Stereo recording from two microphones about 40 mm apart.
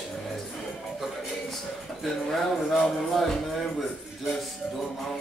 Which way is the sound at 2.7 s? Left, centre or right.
Centre.